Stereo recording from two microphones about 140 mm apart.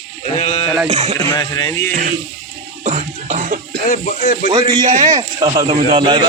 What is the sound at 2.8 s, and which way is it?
Cough, 55° right (ahead or behind).